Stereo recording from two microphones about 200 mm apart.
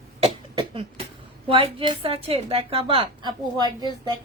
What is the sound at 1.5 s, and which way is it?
Speech, 25° right (ahead or behind).